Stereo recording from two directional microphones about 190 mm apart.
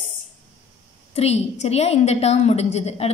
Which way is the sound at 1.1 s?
35° left (ahead or behind).